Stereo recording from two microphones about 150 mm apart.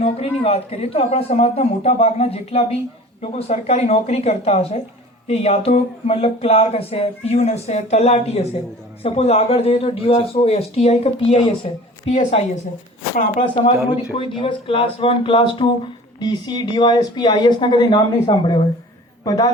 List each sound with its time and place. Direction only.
0.0 s a man's voice: 40° left (ahead or behind)
13.6 s a man's voice: 35° left (ahead or behind)